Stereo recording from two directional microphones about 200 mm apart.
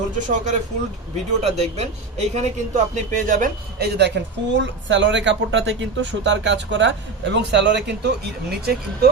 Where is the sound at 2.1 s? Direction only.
35° right (ahead or behind).